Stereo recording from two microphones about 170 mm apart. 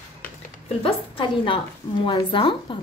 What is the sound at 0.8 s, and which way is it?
A woman's voice, 30° left (ahead or behind).